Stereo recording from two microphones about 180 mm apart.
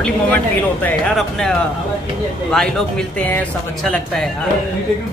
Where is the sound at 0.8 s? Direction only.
5° left (ahead or behind).